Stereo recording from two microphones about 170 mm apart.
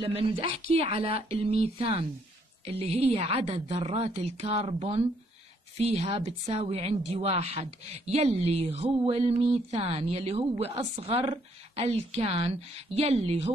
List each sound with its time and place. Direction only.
0.0 s speech: 35° right (ahead or behind)